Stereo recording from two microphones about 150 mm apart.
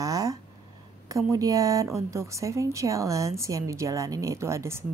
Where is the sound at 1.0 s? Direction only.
20° right (ahead or behind).